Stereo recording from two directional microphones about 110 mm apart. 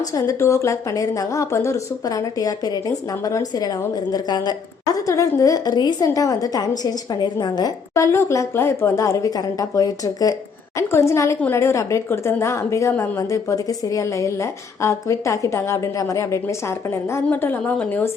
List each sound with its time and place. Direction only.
0.0 s a woman's voice: 30° left (ahead or behind)
7.9 s a woman's voice: 25° left (ahead or behind)